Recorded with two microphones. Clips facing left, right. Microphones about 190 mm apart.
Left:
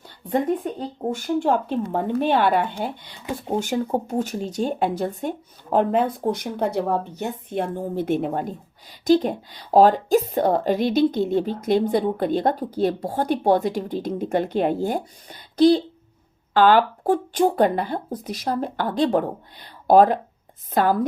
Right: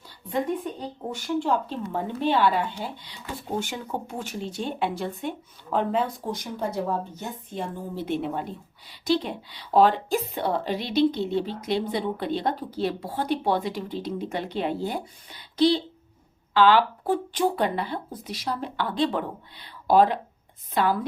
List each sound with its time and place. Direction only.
0.3 s speech: 50° left (ahead or behind)
5.7 s speech: 55° left (ahead or behind)